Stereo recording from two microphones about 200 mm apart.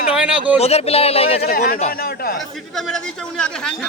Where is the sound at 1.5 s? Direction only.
45° left (ahead or behind).